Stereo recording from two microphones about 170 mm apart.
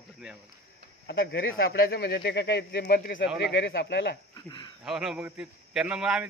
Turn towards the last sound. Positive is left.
turn(degrees=-5)  # may be behind; listen again after turning